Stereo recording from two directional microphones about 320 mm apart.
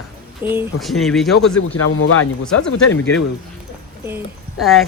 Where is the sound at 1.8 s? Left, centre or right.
Left.